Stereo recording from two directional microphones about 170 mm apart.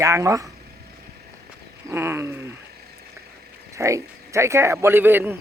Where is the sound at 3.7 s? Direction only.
20° right (ahead or behind).